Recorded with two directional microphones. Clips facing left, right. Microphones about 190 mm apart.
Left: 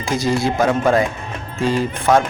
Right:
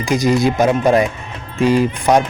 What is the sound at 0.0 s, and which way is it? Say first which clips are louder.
Speech: right 4 dB; 15° right (ahead or behind).